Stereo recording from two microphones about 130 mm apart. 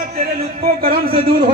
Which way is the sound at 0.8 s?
45° right (ahead or behind).